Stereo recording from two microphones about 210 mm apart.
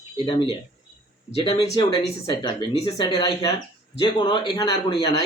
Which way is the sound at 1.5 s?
25° left (ahead or behind).